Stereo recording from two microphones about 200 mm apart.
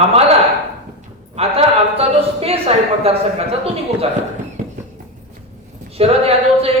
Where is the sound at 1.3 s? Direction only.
30° right (ahead or behind).